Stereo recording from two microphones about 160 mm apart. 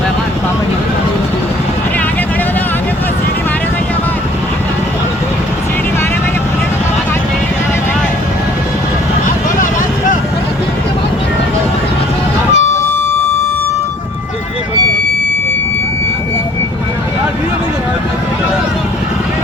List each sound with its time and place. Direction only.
12.5 s vehicle: 15° left (ahead or behind)